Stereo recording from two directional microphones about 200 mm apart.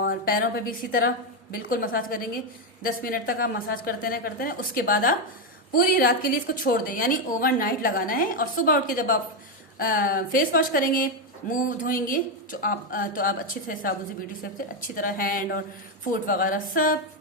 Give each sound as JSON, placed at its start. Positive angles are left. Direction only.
{"t": 0.0, "sound": "a woman's voice", "side_deg": 45}